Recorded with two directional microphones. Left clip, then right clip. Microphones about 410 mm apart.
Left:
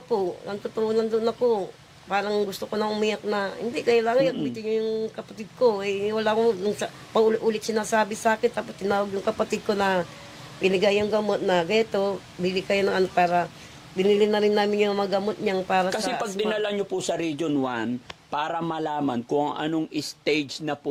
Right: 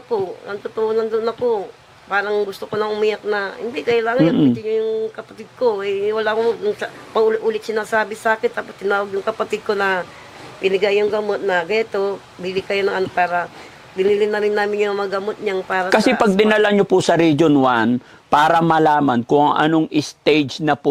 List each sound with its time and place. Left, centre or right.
0.1 s speech: left
15.9 s speech: right
17.6 s a man's voice: right
18.3 s a man's voice: right